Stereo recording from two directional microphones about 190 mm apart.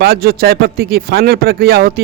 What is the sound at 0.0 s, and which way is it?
Speech, 55° right (ahead or behind).